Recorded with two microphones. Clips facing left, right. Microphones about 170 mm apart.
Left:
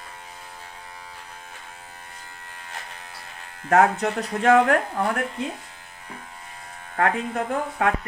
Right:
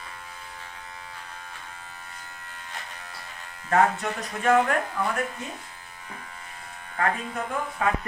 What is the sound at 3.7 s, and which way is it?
Speech, 75° left (ahead or behind).